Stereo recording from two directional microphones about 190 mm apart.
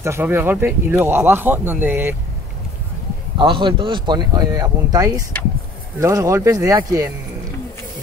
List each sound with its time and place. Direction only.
0.0 s speech: 15° right (ahead or behind)
3.3 s speech: 25° right (ahead or behind)